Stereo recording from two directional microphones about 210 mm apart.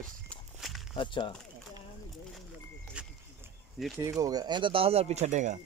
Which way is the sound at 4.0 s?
15° right (ahead or behind).